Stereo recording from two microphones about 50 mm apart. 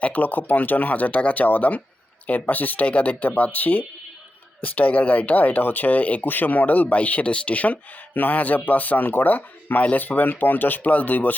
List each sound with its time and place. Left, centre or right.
0.0 s speech: left